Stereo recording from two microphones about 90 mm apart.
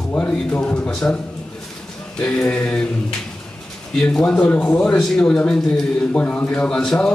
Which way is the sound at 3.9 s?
10° left (ahead or behind).